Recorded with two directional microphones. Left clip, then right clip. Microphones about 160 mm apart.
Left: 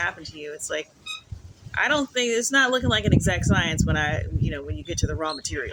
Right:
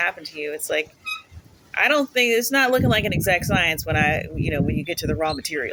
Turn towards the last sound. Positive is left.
turn(degrees=5)  # may be behind; listen again after turning